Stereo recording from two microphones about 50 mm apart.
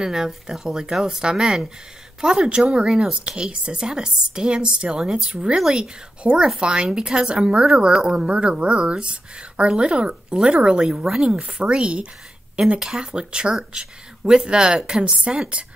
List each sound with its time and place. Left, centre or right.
0.0 s speech: centre
8.3 s speech: right